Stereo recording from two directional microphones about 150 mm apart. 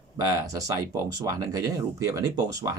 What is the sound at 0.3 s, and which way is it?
Speech, 25° right (ahead or behind).